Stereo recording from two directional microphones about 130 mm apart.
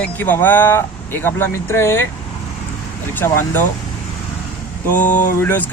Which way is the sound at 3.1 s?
15° left (ahead or behind).